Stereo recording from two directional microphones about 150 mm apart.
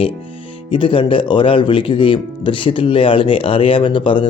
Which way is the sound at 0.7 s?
35° left (ahead or behind).